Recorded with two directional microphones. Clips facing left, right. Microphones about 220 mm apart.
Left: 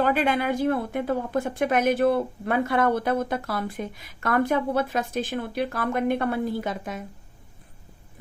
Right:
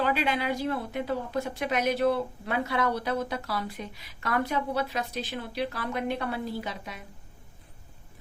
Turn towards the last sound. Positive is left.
turn(degrees=50)  # may be behind; listen again after turning